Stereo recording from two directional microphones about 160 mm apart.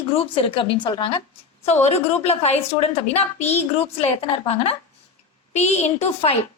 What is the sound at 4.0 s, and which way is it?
A woman's voice, 40° left (ahead or behind).